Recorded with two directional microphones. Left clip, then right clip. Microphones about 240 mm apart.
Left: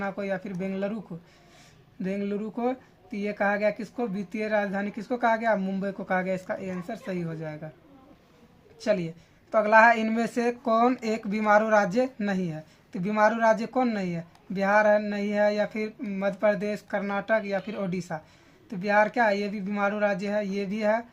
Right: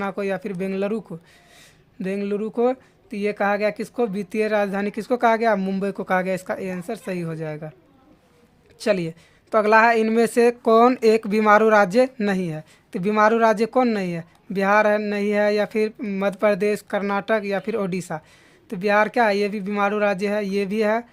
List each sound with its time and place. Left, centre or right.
0.0 s speech: right
2.0 s speech: right
8.8 s speech: right